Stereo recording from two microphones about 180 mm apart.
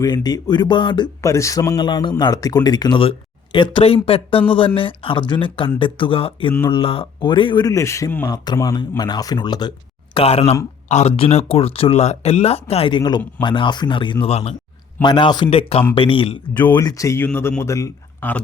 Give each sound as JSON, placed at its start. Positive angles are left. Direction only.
{"t": 0.0, "sound": "speech", "side_deg": 20}
{"t": 15.0, "sound": "speech", "side_deg": 25}
{"t": 16.7, "sound": "speech", "side_deg": 20}